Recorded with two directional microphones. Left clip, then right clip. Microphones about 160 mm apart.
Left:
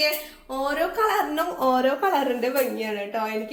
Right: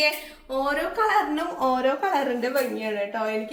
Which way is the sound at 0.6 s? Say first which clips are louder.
Left 1 dB; 60° left (ahead or behind).